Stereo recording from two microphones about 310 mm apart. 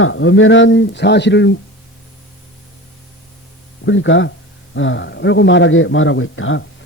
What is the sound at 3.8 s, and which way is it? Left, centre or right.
A man's voice, left.